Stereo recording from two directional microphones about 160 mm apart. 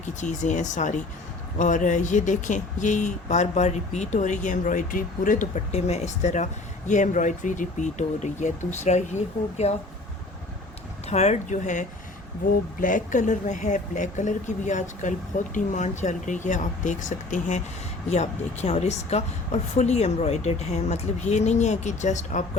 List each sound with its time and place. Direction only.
0.0 s speech: 50° left (ahead or behind)
11.1 s speech: 45° left (ahead or behind)